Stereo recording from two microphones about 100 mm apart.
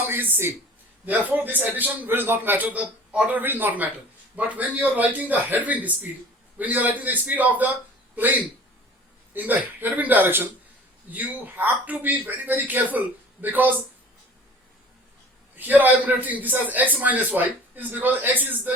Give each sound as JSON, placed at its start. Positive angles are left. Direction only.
{"t": 0.0, "sound": "a man's voice", "side_deg": -20}
{"t": 15.5, "sound": "a man's voice", "side_deg": -20}